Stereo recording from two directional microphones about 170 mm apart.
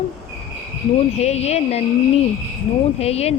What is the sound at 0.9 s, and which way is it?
Speech, 40° left (ahead or behind).